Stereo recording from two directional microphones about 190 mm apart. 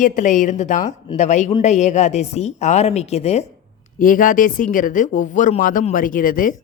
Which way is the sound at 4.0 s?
45° left (ahead or behind).